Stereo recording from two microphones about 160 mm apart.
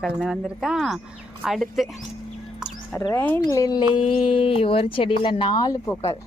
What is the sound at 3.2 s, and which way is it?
Speech, 10° left (ahead or behind).